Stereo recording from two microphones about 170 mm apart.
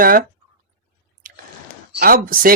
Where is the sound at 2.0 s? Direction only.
60° right (ahead or behind).